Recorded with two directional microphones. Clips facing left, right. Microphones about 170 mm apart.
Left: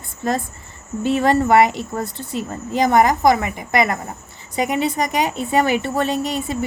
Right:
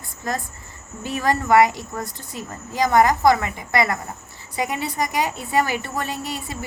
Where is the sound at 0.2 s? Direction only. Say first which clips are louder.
Left 6 dB; 25° left (ahead or behind).